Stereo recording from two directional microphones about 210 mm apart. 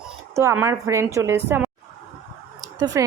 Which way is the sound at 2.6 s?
15° right (ahead or behind).